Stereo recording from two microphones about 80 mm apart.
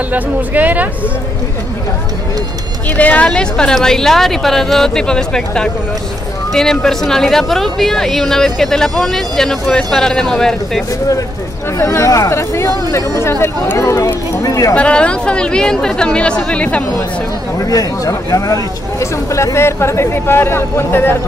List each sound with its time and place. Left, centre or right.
0.1 s speech: right
3.0 s speech: centre
11.8 s speech: left
14.8 s speech: centre
17.6 s speech: left